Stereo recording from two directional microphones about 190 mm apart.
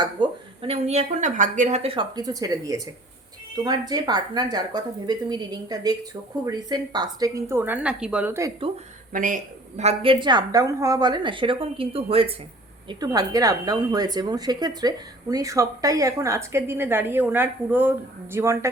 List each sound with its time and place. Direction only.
0.0 s a woman's voice: 25° right (ahead or behind)
9.1 s a woman's voice: 45° right (ahead or behind)
12.9 s a woman's voice: 20° right (ahead or behind)